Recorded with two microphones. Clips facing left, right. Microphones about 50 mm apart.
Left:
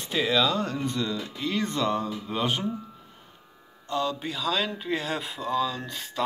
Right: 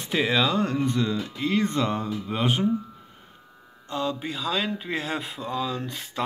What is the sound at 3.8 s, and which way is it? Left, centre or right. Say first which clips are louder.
Speech: even; centre.